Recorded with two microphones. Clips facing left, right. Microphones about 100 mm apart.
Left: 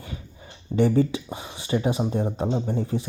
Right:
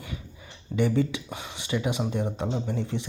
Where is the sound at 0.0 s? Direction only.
40° left (ahead or behind).